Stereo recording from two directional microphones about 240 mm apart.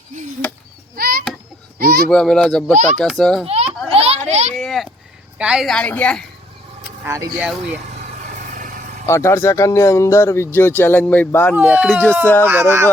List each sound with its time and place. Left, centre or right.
0.9 s a sound: right
1.8 s a child's voice: right
2.0 s a woman's voice: centre
2.7 s a child's voice: right
3.0 s a woman's voice: centre
3.4 s children playing: right
4.5 s a sound: centre
5.4 s a woman's voice: centre
7.0 s speech: centre
9.0 s speech: centre
11.5 s a woman's voice: centre
12.5 s speech: centre